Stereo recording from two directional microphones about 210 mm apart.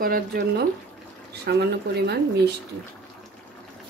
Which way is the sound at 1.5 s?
50° right (ahead or behind).